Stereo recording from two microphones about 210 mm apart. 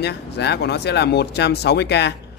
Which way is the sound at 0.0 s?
55° left (ahead or behind).